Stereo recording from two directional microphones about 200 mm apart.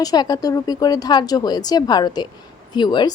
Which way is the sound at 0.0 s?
20° left (ahead or behind).